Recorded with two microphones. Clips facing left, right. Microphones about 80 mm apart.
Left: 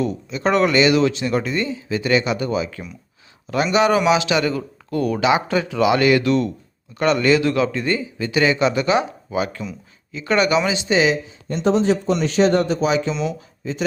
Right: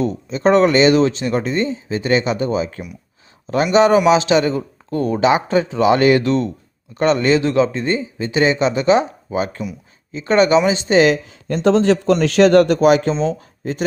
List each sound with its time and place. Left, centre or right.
0.0 s a man's voice: right